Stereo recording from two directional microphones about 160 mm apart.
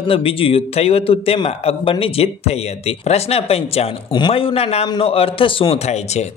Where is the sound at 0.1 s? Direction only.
35° left (ahead or behind).